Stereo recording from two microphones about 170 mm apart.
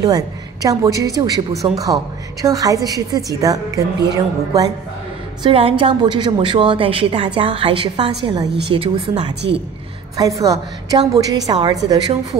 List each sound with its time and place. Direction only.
0.0 s a woman's voice: 20° right (ahead or behind)
5.4 s a woman's voice: 35° right (ahead or behind)
10.1 s a woman's voice: 20° right (ahead or behind)